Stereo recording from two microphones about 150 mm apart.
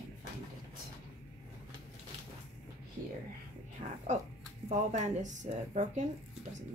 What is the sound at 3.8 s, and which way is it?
Speech, 55° right (ahead or behind).